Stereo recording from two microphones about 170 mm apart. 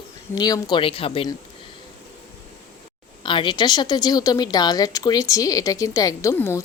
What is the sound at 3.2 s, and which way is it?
A woman's voice, 30° left (ahead or behind).